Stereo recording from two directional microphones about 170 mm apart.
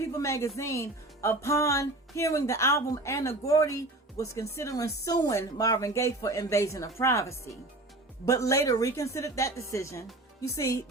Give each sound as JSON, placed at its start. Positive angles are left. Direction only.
{"t": 0.0, "sound": "speech", "side_deg": 15}